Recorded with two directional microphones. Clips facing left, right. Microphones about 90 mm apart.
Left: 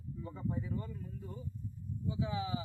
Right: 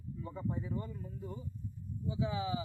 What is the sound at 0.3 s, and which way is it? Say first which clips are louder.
Speech: even; 25° right (ahead or behind).